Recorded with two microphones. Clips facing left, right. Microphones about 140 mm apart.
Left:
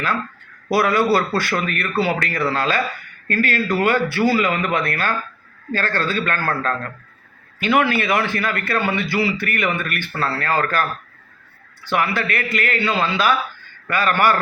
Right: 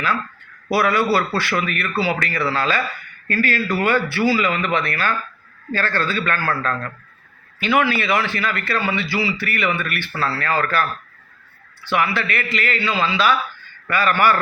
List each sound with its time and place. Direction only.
0.7 s a man's voice: 45° left (ahead or behind)